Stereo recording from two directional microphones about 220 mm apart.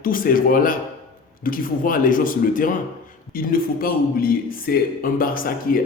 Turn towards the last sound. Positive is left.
turn(degrees=40)  # may be behind; listen again after turning